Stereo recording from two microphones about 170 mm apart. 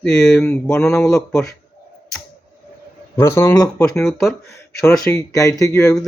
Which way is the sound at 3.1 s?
15° left (ahead or behind).